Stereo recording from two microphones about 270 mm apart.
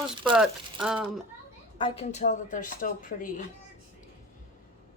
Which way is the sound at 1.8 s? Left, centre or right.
Left.